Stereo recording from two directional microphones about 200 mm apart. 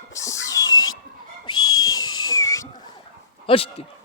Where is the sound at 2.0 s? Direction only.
20° left (ahead or behind).